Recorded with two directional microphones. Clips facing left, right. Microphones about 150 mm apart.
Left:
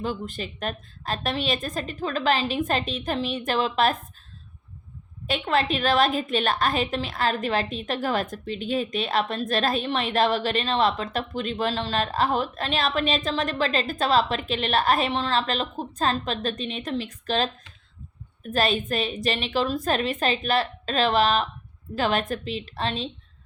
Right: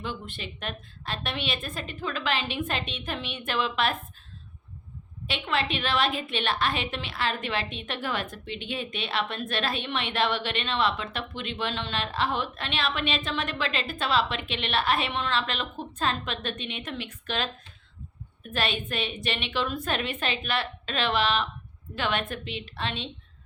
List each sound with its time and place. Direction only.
0.0 s a woman's voice: 40° left (ahead or behind)
5.2 s a woman's voice: 45° left (ahead or behind)
18.5 s a woman's voice: 40° left (ahead or behind)